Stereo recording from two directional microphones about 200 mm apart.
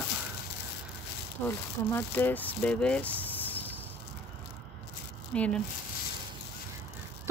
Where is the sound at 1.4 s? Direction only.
10° left (ahead or behind).